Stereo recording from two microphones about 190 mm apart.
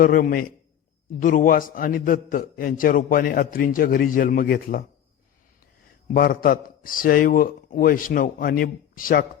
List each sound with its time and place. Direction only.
0.0 s a man's voice: 50° left (ahead or behind)
6.1 s a man's voice: 50° left (ahead or behind)